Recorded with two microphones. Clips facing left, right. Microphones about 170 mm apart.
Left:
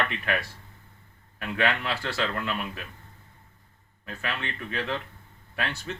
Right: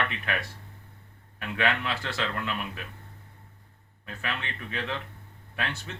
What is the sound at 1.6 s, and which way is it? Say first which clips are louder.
Speech: left 1 dB; 15° right (ahead or behind).